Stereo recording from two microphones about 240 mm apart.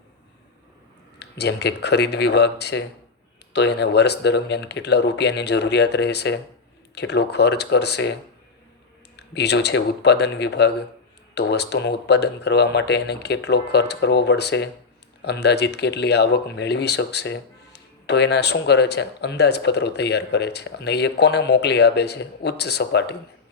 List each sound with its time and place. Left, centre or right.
1.2 s speech: left
9.1 s speech: left